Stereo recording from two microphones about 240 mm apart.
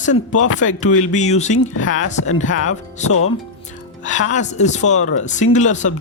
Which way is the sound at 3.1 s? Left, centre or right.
Left.